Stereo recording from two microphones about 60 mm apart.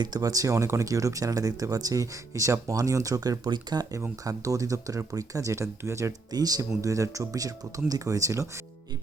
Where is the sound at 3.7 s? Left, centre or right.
Right.